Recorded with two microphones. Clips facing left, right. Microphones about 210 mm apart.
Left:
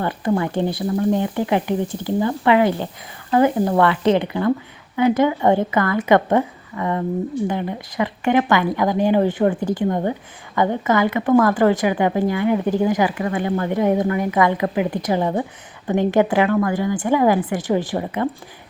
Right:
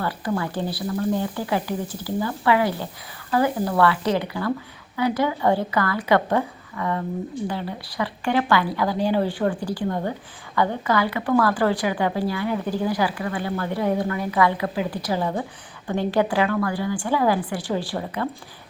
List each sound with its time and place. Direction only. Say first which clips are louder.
0.0 s speech: left 5 dB; 20° left (ahead or behind)